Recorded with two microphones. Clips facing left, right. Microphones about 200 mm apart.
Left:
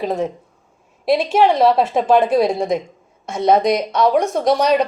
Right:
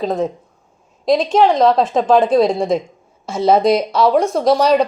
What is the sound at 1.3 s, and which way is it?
Speech, 5° left (ahead or behind).